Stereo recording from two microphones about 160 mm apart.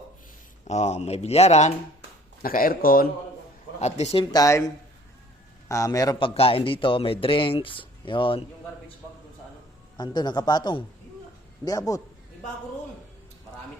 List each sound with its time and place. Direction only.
0.6 s speech: 45° left (ahead or behind)
2.4 s speech: 65° left (ahead or behind)
3.8 s speech: 45° left (ahead or behind)
4.3 s a man's voice: 20° left (ahead or behind)
10.0 s speech: 25° left (ahead or behind)